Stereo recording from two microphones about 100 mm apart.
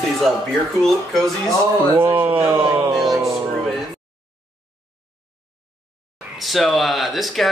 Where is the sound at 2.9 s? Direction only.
Centre (ahead or behind).